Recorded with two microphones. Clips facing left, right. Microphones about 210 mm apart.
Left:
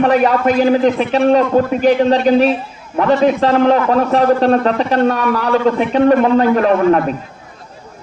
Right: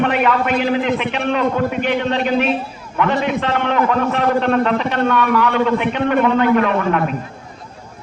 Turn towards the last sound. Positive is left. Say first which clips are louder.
# left 4 dB
turn(degrees=35)  # may be behind; listen again after turning